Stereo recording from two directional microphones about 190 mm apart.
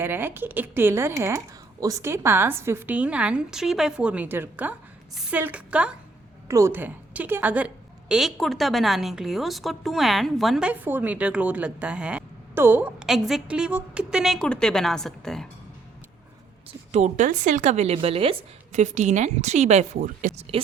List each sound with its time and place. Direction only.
0.0 s a woman's voice: 10° right (ahead or behind)
16.9 s speech: 40° right (ahead or behind)